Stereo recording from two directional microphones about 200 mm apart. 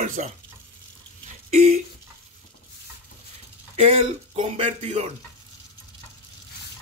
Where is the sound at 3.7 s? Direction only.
30° right (ahead or behind).